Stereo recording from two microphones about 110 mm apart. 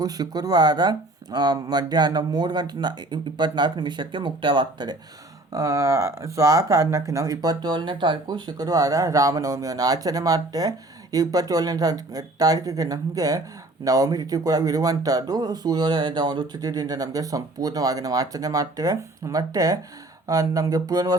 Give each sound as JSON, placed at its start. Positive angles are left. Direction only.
{"t": 0.0, "sound": "speech", "side_deg": -35}
{"t": 5.5, "sound": "speech", "side_deg": -30}